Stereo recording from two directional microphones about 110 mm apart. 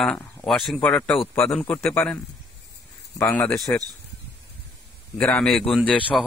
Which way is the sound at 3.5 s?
Centre (ahead or behind).